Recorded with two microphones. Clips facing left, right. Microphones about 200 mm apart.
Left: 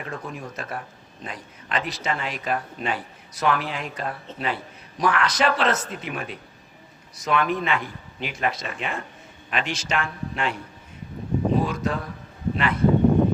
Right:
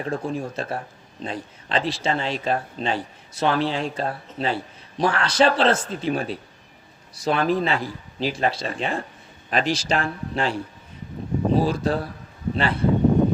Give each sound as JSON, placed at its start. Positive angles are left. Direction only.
{"t": 0.0, "sound": "speech", "side_deg": -30}